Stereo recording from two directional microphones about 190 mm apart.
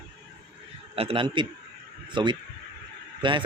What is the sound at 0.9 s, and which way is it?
Speech, 30° right (ahead or behind).